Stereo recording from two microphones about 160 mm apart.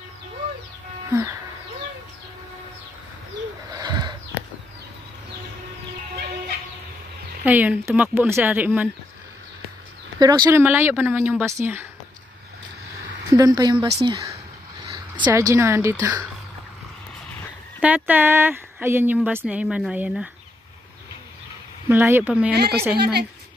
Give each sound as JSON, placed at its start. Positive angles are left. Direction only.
{"t": 3.7, "sound": "a sound", "side_deg": -25}
{"t": 7.4, "sound": "speech", "side_deg": -10}
{"t": 10.1, "sound": "speech", "side_deg": -25}
{"t": 10.6, "sound": "speech", "side_deg": -15}
{"t": 13.3, "sound": "speech", "side_deg": -25}
{"t": 17.8, "sound": "speech", "side_deg": -10}
{"t": 21.8, "sound": "speech", "side_deg": -15}
{"t": 22.5, "sound": "a woman's voice", "side_deg": -85}